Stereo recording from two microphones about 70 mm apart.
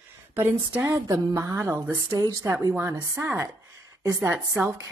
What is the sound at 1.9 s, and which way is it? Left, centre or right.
Speech, right.